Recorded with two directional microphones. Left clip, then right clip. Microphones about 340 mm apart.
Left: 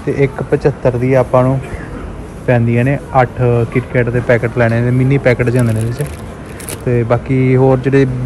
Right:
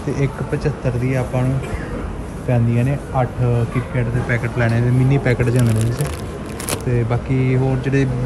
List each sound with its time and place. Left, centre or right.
0.1 s speech: centre